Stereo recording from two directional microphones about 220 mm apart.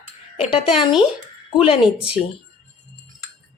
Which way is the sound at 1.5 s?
25° left (ahead or behind).